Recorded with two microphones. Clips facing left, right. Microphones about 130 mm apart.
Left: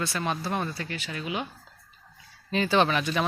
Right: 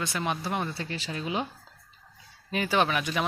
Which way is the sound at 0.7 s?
30° right (ahead or behind).